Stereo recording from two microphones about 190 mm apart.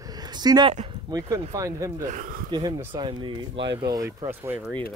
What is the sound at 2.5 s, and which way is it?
Speech, 20° right (ahead or behind).